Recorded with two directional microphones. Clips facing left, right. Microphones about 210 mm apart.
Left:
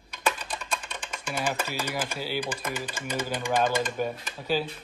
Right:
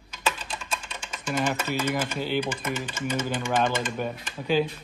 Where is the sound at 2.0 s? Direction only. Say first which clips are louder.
Right 4 dB; 5° left (ahead or behind).